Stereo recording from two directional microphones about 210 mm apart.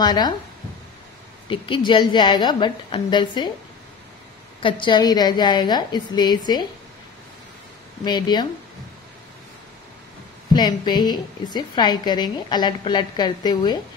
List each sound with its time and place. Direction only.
0.0 s a woman's voice: 20° left (ahead or behind)
1.5 s a woman's voice: 25° left (ahead or behind)
4.6 s a woman's voice: 25° left (ahead or behind)
8.0 s a woman's voice: 20° left (ahead or behind)
10.5 s a woman's voice: 20° left (ahead or behind)